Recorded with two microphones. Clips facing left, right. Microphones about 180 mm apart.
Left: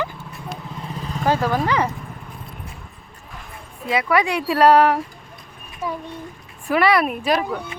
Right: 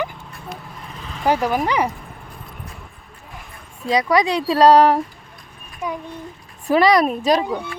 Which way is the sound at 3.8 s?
35° right (ahead or behind).